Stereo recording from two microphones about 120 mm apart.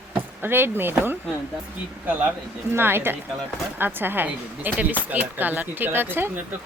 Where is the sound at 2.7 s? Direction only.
20° right (ahead or behind).